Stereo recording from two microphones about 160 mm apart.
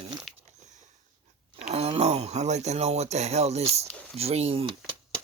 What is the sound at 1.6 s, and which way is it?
Speech, 40° right (ahead or behind).